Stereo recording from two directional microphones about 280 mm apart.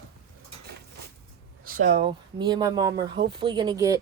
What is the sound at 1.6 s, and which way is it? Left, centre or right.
Speech, right.